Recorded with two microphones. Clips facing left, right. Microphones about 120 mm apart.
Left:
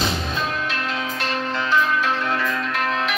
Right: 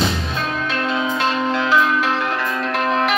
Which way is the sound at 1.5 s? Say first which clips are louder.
Right 1 dB; 90° right.